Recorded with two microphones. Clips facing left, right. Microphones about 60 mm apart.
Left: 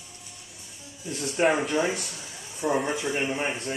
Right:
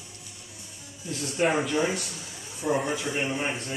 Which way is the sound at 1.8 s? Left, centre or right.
Left.